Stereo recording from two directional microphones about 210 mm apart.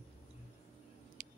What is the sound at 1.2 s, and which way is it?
Vehicle, 35° right (ahead or behind).